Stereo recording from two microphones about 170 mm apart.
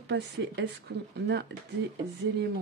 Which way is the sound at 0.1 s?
90° right.